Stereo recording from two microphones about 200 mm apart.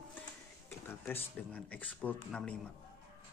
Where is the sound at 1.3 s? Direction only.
5° left (ahead or behind).